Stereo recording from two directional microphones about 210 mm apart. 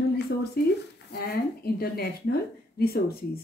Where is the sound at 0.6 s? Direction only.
45° left (ahead or behind).